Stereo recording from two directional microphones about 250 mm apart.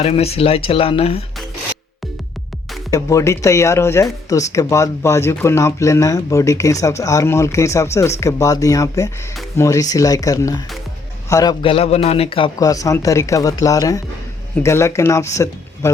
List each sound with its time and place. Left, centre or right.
0.0 s speech: left
2.9 s speech: centre